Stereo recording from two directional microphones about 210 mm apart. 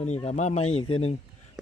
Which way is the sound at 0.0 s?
30° left (ahead or behind).